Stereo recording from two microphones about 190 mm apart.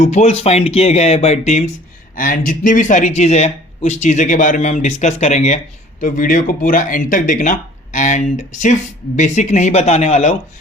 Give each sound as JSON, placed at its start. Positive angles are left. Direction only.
{"t": 0.0, "sound": "speech", "side_deg": 35}